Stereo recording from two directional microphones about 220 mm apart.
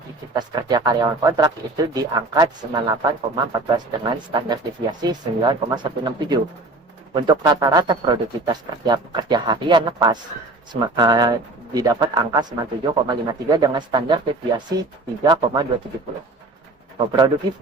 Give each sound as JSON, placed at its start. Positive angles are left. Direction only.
{"t": 0.3, "sound": "speech", "side_deg": -20}
{"t": 17.1, "sound": "speech", "side_deg": -20}